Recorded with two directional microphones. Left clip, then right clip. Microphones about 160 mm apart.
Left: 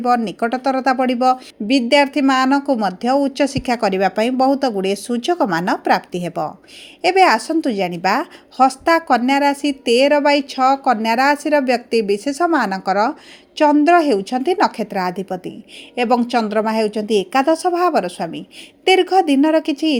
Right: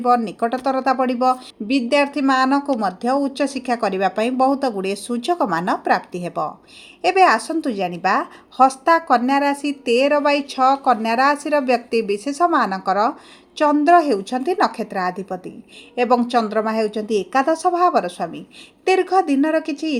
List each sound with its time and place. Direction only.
0.0 s speech: 30° left (ahead or behind)